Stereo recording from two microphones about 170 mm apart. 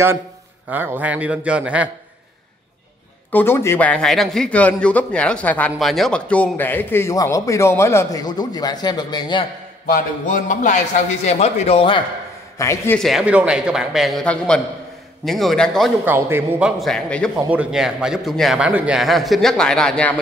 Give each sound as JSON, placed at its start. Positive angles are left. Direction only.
{"t": 0.7, "sound": "a man's voice", "side_deg": -10}
{"t": 3.3, "sound": "a man's voice", "side_deg": 10}
{"t": 9.8, "sound": "music", "side_deg": 55}
{"t": 11.2, "sound": "speech", "side_deg": 40}
{"t": 12.5, "sound": "a man's voice", "side_deg": 15}
{"t": 13.0, "sound": "a man's voice", "side_deg": -5}
{"t": 16.1, "sound": "a man's voice", "side_deg": -15}
{"t": 17.4, "sound": "a man's voice", "side_deg": -10}